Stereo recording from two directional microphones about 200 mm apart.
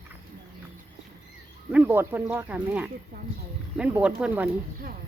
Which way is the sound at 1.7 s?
10° right (ahead or behind).